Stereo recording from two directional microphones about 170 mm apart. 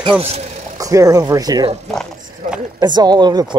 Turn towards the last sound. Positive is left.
turn(degrees=-25)  # may be behind; listen again after turning